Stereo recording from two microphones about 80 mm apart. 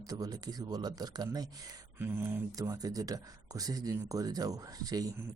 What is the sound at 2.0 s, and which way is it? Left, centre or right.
Speech, right.